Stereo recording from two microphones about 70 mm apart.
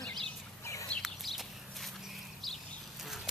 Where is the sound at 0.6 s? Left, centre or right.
Left.